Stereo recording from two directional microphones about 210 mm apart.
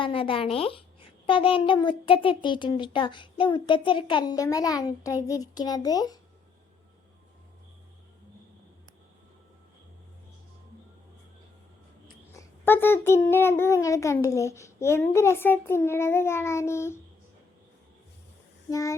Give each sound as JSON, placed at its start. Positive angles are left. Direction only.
{"t": 0.0, "sound": "a child's voice", "side_deg": 25}
{"t": 12.3, "sound": "a child's voice", "side_deg": 10}
{"t": 18.7, "sound": "a child's voice", "side_deg": 15}